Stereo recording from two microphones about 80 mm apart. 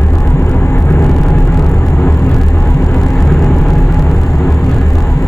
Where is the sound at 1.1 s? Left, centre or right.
Centre.